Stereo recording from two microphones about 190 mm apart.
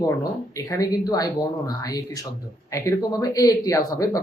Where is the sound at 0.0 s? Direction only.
15° left (ahead or behind).